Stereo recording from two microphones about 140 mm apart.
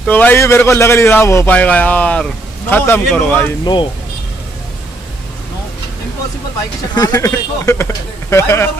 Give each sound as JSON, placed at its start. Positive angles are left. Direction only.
{"t": 0.0, "sound": "a man's voice", "side_deg": 10}
{"t": 3.6, "sound": "speech", "side_deg": 35}
{"t": 7.0, "sound": "speech", "side_deg": 25}